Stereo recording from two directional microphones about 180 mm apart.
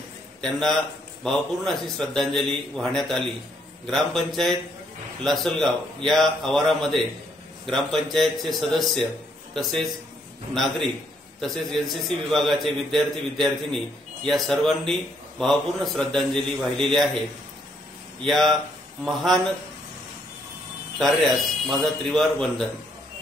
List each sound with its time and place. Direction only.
0.4 s a man's voice: centre (ahead or behind)
18.2 s a man's voice: centre (ahead or behind)
21.6 s a man's voice: centre (ahead or behind)